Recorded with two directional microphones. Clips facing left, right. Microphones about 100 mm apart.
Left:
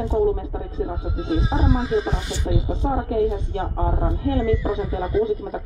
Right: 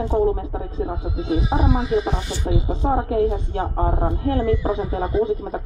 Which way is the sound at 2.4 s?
45° right (ahead or behind).